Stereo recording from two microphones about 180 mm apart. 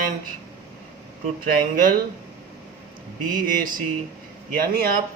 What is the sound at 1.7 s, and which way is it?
Speech, 50° right (ahead or behind).